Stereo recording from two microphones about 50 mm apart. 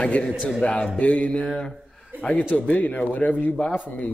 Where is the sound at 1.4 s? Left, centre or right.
Centre.